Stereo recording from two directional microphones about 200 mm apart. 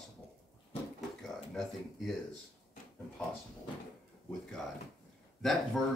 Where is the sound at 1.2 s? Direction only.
Centre (ahead or behind).